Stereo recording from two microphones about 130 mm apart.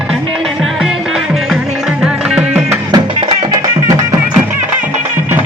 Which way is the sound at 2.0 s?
5° right (ahead or behind).